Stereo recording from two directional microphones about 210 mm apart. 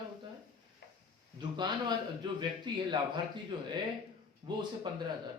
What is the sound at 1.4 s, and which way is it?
A man's voice, 20° right (ahead or behind).